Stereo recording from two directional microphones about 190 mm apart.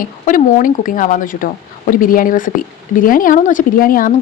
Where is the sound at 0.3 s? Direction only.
45° left (ahead or behind).